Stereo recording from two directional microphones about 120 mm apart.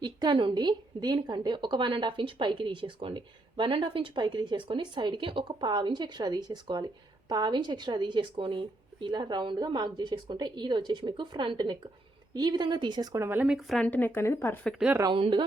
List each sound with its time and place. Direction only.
0.0 s a woman's voice: 40° right (ahead or behind)
13.2 s speech: 15° right (ahead or behind)
13.6 s a woman's voice: centre (ahead or behind)
13.8 s a woman's voice: 15° left (ahead or behind)
15.1 s speech: 45° right (ahead or behind)